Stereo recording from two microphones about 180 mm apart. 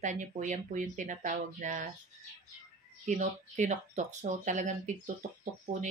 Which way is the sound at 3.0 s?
40° right (ahead or behind).